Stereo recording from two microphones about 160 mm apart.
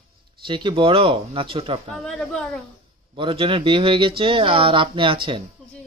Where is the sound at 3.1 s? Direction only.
35° right (ahead or behind).